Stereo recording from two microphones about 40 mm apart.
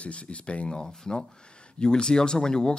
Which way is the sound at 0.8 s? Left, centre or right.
Centre.